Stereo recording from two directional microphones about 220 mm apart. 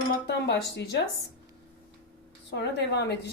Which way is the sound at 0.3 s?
50° left (ahead or behind).